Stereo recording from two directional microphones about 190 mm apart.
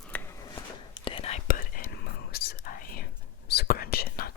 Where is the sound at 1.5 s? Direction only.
50° left (ahead or behind).